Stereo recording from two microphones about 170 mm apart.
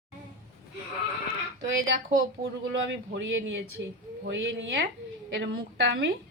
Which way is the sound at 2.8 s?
90° right.